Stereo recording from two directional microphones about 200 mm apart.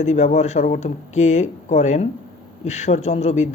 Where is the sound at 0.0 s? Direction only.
35° left (ahead or behind).